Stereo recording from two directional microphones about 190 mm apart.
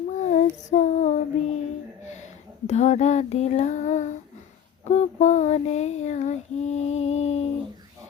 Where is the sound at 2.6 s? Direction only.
35° left (ahead or behind).